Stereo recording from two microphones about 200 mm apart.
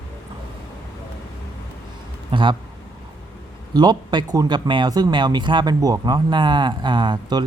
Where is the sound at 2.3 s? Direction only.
25° right (ahead or behind).